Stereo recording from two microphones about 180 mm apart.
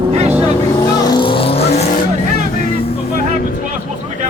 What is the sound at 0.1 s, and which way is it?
Vehicle, 35° right (ahead or behind).